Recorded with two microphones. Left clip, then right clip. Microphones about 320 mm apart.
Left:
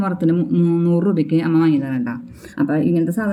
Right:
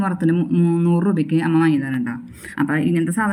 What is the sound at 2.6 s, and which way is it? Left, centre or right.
Speech, centre.